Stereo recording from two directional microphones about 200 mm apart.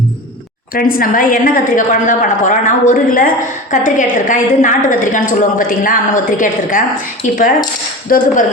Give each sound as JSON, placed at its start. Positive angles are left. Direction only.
{"t": 0.7, "sound": "a woman's voice", "side_deg": 45}
{"t": 8.1, "sound": "speech", "side_deg": 45}